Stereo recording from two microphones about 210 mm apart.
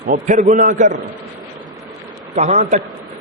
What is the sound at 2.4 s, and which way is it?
Speech, 35° right (ahead or behind).